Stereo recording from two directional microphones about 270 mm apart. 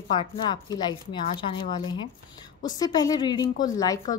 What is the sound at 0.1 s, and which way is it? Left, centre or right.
A woman's voice, centre.